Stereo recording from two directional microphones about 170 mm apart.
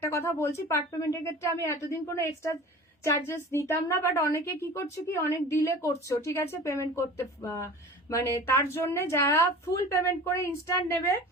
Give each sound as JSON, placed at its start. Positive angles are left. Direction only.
{"t": 0.0, "sound": "a woman's voice", "side_deg": 15}